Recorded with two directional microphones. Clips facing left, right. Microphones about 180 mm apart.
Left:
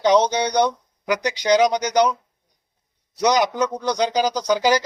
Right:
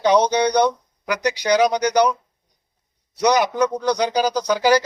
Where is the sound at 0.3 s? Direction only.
20° left (ahead or behind).